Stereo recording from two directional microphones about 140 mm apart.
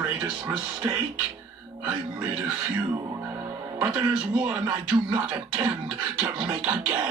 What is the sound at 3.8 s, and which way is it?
Speech, 5° right (ahead or behind).